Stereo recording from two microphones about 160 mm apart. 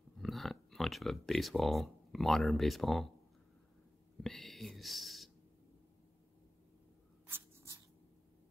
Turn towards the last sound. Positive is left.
turn(degrees=-15)  # may be behind; listen again after turning